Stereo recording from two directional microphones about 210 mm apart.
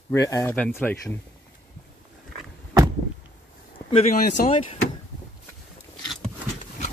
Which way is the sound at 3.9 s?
30° left (ahead or behind).